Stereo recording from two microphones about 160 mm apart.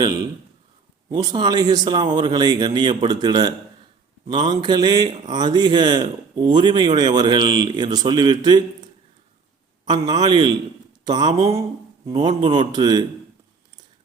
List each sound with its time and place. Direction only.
1.1 s speech: 25° right (ahead or behind)
9.8 s speech: 25° right (ahead or behind)